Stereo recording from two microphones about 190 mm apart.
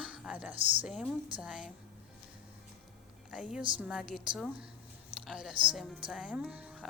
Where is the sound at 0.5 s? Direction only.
30° right (ahead or behind).